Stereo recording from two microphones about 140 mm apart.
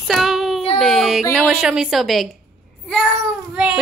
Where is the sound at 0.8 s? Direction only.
Centre (ahead or behind).